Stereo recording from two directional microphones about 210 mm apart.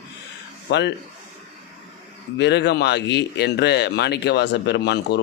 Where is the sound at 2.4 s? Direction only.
55° left (ahead or behind).